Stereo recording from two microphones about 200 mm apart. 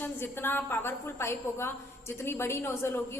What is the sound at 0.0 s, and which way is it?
A woman's voice, 10° left (ahead or behind).